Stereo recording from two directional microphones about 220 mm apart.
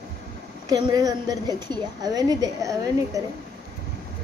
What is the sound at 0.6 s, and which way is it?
A woman's voice, 15° right (ahead or behind).